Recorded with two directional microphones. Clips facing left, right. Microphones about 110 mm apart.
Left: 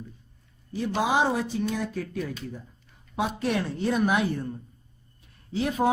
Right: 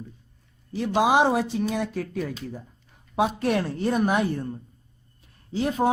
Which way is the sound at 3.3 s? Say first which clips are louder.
Right 3 dB; 55° right (ahead or behind).